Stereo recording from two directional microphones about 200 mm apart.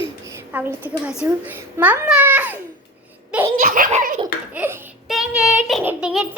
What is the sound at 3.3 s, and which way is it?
Laughter, 10° right (ahead or behind).